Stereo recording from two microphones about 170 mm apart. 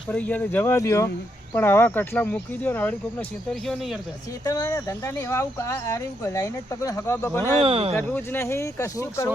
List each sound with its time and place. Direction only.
0.1 s speech: 10° left (ahead or behind)
3.5 s speech: centre (ahead or behind)
4.4 s speech: 20° left (ahead or behind)
7.6 s speech: 35° right (ahead or behind)
7.9 s speech: 15° left (ahead or behind)